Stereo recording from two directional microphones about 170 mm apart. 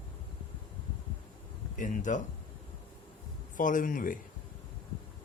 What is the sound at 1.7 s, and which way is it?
Speech, 50° left (ahead or behind).